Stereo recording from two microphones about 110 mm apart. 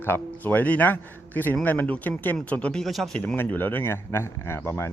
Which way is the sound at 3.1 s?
15° left (ahead or behind).